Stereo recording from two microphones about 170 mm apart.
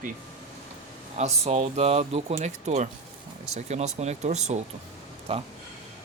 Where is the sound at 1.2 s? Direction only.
40° right (ahead or behind).